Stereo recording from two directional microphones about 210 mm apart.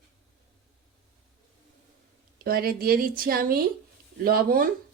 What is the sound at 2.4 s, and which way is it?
Speech, 45° right (ahead or behind).